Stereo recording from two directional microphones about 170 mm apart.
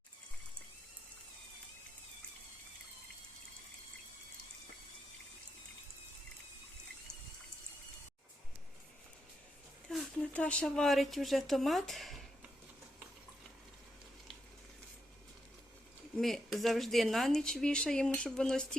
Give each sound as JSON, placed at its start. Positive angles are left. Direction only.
{"t": 9.9, "sound": "speech", "side_deg": 5}
{"t": 16.1, "sound": "speech", "side_deg": 0}